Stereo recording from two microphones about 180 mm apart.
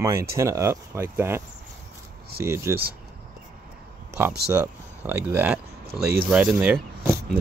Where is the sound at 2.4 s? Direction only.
15° right (ahead or behind).